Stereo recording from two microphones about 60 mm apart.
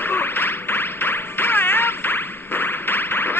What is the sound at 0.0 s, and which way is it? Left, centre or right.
Music, left.